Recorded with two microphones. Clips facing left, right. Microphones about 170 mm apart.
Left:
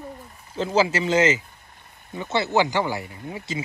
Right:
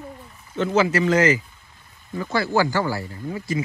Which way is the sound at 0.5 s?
30° left (ahead or behind).